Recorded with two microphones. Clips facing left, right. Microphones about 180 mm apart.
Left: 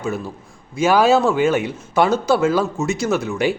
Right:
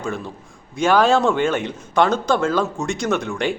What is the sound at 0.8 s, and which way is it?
Speech, 5° left (ahead or behind).